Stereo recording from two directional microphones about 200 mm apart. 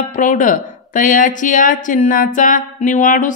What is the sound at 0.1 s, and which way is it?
Speech, 40° left (ahead or behind).